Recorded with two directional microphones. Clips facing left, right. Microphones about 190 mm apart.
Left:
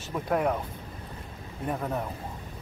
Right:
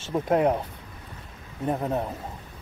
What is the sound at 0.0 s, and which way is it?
Speech, 25° right (ahead or behind).